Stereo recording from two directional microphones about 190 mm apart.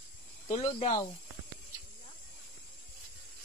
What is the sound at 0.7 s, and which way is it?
Speech, 35° left (ahead or behind).